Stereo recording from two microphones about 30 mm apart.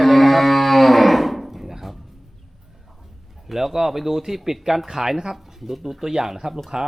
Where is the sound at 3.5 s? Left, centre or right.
Centre.